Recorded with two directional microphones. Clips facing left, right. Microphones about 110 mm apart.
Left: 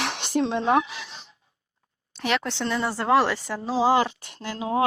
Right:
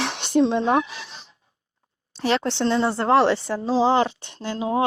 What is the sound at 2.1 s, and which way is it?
Speech, 30° right (ahead or behind).